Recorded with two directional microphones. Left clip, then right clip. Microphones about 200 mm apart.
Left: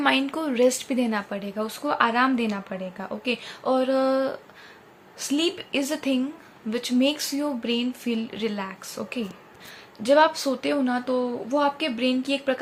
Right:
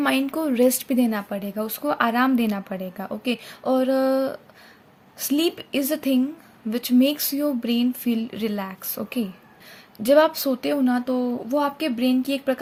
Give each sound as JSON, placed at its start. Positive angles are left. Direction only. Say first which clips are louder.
{"t": 0.0, "sound": "speech", "louder": "even", "side_deg": -40}